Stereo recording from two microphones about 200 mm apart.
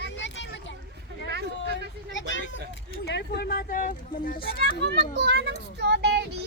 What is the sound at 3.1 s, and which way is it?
Speech, 55° left (ahead or behind).